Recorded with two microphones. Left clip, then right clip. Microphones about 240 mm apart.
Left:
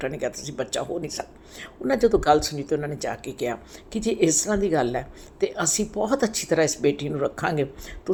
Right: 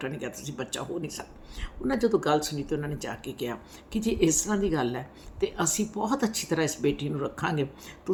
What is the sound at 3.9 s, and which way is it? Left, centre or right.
Speech, centre.